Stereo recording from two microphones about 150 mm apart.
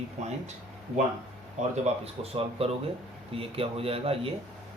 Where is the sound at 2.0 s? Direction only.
40° right (ahead or behind).